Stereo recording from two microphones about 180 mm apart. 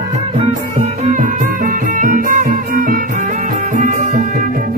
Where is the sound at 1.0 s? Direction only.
45° right (ahead or behind).